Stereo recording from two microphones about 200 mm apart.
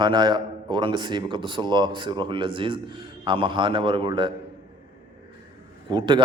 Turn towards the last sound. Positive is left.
turn(degrees=-25)  # may be behind; listen again after turning